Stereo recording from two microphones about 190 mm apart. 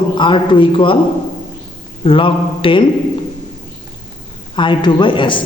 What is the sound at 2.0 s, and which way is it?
Speech, 25° left (ahead or behind).